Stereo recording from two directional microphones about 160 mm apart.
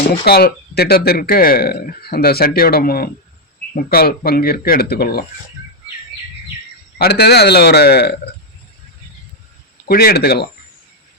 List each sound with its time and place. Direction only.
0.3 s speech: 85° left
7.0 s a man's voice: 90° left
9.8 s speech: 75° left (ahead or behind)